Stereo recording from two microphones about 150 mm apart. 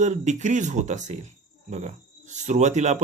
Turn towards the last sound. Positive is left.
turn(degrees=-50)  # may be behind; listen again after turning